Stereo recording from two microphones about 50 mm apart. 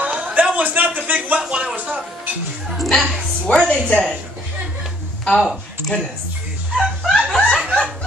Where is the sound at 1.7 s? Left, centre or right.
Right.